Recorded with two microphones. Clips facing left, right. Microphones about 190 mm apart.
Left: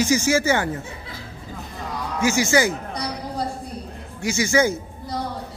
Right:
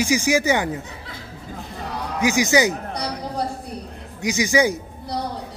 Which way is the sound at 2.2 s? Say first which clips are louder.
Right 1 dB; 15° right (ahead or behind).